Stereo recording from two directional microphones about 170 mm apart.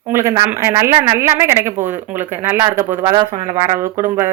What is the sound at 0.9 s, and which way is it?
Speech, 25° right (ahead or behind).